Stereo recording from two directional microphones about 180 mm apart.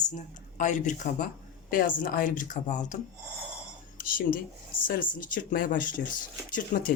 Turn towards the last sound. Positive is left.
turn(degrees=50)  # may be behind; listen again after turning